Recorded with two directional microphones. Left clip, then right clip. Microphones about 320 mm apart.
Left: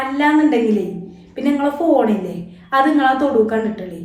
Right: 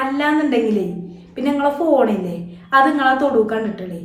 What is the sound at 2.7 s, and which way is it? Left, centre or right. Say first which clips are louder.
Speech: even; centre.